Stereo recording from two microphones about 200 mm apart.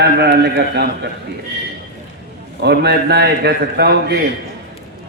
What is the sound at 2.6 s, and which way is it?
A man's voice, 55° right (ahead or behind).